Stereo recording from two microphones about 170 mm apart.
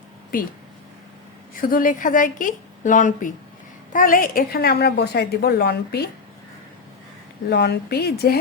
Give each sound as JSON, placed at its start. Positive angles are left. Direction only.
{"t": 0.3, "sound": "speech", "side_deg": 55}
{"t": 1.6, "sound": "a woman's voice", "side_deg": 55}
{"t": 7.5, "sound": "a woman's voice", "side_deg": 70}